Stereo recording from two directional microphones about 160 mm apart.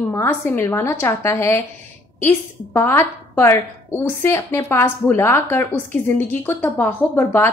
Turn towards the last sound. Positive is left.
turn(degrees=15)  # may be behind; listen again after turning